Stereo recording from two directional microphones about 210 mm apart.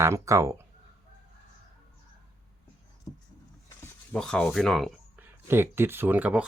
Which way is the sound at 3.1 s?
20° left (ahead or behind).